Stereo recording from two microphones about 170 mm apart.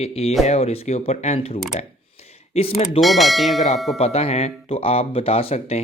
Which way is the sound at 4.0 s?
35° left (ahead or behind).